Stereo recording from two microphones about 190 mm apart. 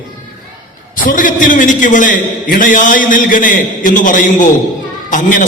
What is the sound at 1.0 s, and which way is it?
A man's voice, 45° left (ahead or behind).